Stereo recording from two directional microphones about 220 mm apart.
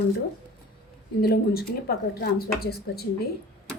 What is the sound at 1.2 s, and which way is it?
Speech, 45° left (ahead or behind).